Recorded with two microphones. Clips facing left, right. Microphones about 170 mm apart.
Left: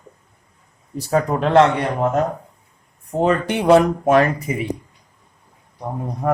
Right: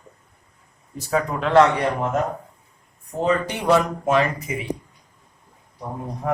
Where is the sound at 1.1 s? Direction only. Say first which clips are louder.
Left 4 dB; 40° left (ahead or behind).